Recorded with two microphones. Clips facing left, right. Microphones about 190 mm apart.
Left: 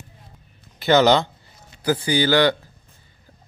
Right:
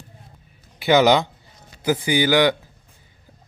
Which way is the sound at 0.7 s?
10° right (ahead or behind).